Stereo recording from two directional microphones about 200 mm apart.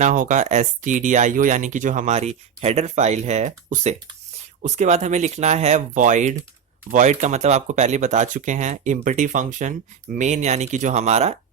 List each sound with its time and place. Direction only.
0.0 s speech: 40° right (ahead or behind)